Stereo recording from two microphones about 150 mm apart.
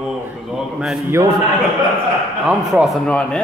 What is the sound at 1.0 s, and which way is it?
Speech, 20° right (ahead or behind).